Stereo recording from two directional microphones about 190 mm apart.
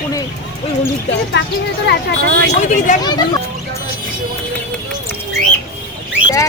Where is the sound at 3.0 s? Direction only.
20° left (ahead or behind).